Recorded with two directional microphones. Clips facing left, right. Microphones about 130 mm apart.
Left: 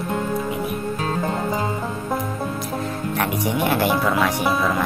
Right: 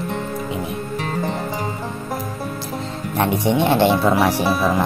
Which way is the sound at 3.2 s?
25° right (ahead or behind).